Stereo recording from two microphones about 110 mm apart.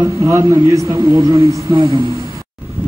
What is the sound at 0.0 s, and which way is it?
A man's voice, 25° right (ahead or behind).